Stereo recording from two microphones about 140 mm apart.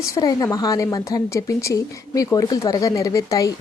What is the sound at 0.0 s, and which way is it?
A woman's voice, 25° left (ahead or behind).